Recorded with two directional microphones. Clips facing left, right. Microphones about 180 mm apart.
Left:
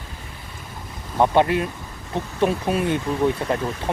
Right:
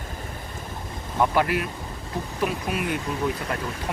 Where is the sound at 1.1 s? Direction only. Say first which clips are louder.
Left 4 dB; 25° left (ahead or behind).